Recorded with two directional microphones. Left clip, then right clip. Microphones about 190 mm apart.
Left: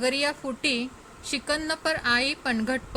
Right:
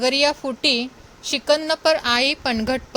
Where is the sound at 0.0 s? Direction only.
25° right (ahead or behind).